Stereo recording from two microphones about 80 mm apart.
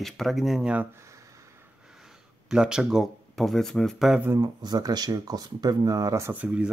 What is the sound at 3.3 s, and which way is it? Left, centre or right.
Speech, centre.